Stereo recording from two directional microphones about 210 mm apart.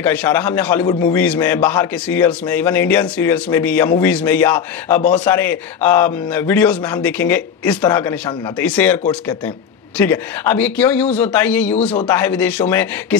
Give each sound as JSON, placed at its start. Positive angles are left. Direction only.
{"t": 0.0, "sound": "a man's voice", "side_deg": 10}
{"t": 7.8, "sound": "speech", "side_deg": 20}
{"t": 8.5, "sound": "a man's voice", "side_deg": 5}